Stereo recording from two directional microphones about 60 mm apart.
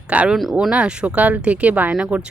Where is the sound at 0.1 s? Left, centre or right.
Right.